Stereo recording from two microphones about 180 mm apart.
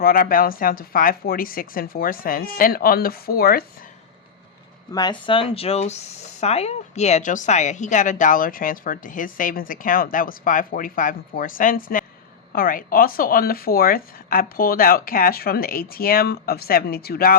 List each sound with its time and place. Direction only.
0.0 s a woman's voice: 55° left (ahead or behind)
4.9 s a woman's voice: 20° left (ahead or behind); by 17.3 s 55° left (ahead or behind)